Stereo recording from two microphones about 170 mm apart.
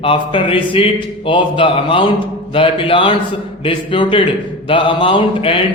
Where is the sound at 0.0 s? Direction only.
30° left (ahead or behind).